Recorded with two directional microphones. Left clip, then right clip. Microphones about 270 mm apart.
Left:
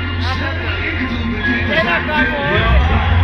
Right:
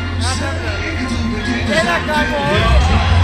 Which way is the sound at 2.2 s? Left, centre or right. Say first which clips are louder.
Even; right.